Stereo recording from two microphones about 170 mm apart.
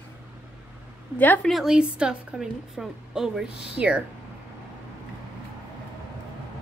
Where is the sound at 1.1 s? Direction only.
10° left (ahead or behind).